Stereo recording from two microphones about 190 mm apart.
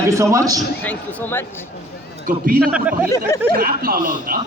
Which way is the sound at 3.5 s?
50° right (ahead or behind).